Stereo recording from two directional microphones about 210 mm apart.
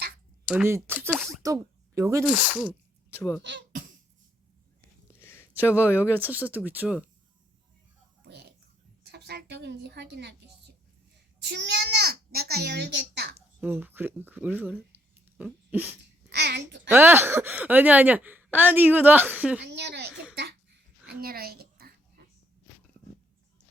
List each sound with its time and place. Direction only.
0.4 s speech: 10° right (ahead or behind)
3.2 s speech: 10° left (ahead or behind)
3.7 s cough: 40° right (ahead or behind)
5.2 s speech: 10° left (ahead or behind)
6.1 s speech: 10° right (ahead or behind)
9.1 s a child's voice: 50° right (ahead or behind)
11.4 s a child's voice: 55° right (ahead or behind)
13.6 s speech: 10° right (ahead or behind)
14.9 s a sound: 10° right (ahead or behind)
15.7 s speech: 10° right (ahead or behind)
16.3 s a child's voice: 50° right (ahead or behind)
16.9 s speech: 10° right (ahead or behind)
19.6 s a child's voice: 50° right (ahead or behind)
20.3 s a sound: 50° right (ahead or behind)